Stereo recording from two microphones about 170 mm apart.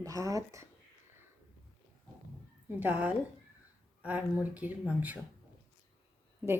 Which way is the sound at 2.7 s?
10° right (ahead or behind).